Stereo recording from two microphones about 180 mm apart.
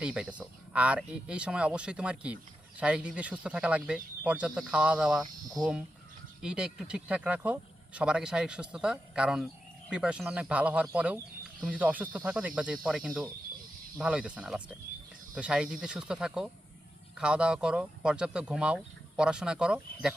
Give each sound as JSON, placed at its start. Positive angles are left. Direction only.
{"t": 0.0, "sound": "speech", "side_deg": -5}
{"t": 5.2, "sound": "speech", "side_deg": -20}
{"t": 6.4, "sound": "speech", "side_deg": -5}